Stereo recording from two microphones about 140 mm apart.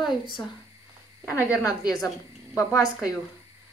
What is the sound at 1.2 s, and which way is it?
A woman's voice, 20° left (ahead or behind).